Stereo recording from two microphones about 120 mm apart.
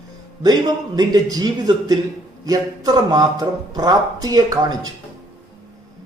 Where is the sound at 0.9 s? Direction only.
35° right (ahead or behind).